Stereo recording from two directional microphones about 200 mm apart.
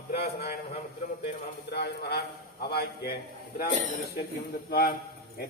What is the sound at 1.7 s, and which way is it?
A man's voice, 55° left (ahead or behind).